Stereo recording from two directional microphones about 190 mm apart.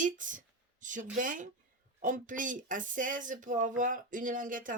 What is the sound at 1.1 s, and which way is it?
Speech, 45° right (ahead or behind).